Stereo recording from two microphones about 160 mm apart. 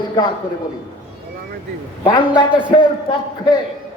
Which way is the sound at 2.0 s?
30° left (ahead or behind).